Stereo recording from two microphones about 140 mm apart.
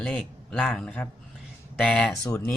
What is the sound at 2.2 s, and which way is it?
Speech, 15° left (ahead or behind).